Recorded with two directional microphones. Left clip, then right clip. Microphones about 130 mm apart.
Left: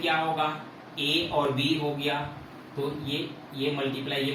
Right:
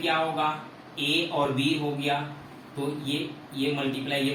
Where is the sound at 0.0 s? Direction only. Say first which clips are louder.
Right 1 dB; 25° right (ahead or behind).